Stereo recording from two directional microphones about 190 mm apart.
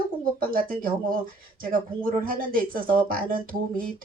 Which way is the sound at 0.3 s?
50° right (ahead or behind).